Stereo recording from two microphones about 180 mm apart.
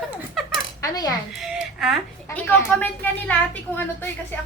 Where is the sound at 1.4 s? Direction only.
Centre (ahead or behind).